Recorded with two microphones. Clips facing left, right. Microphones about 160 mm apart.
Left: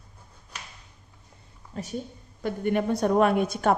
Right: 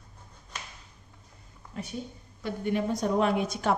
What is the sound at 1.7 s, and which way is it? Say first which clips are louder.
Speech: left 2 dB; 40° left (ahead or behind).